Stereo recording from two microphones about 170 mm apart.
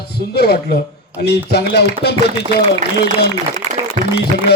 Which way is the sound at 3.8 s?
20° right (ahead or behind).